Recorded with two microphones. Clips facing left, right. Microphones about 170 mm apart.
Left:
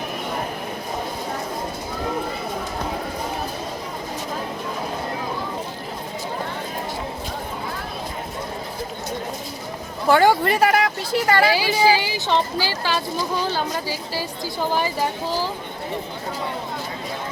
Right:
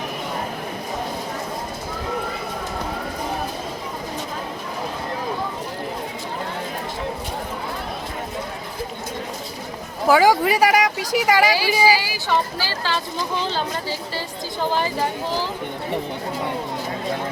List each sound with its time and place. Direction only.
10.1 s speech: 5° right (ahead or behind)
11.9 s speech: 20° left (ahead or behind)